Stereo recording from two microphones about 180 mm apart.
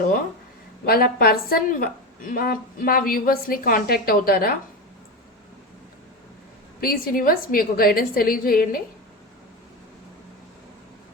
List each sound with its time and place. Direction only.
0.9 s a woman's voice: 55° left (ahead or behind)
6.8 s a woman's voice: 55° left (ahead or behind)